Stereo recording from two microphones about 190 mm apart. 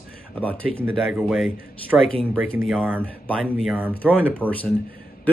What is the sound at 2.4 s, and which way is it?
Speech, 90° right.